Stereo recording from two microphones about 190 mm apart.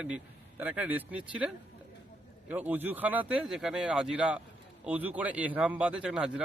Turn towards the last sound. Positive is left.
turn(degrees=-5)  # may be behind; listen again after turning